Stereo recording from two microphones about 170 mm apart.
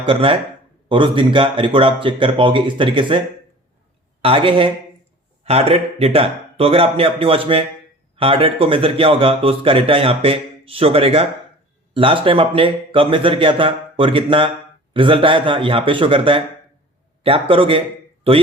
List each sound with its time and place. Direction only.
0.0 s a man's voice: 30° right (ahead or behind)